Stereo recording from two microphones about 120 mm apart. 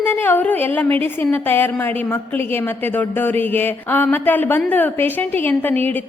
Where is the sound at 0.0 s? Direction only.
15° left (ahead or behind).